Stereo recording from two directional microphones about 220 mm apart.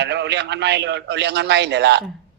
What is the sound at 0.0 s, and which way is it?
A man's voice, 50° right (ahead or behind).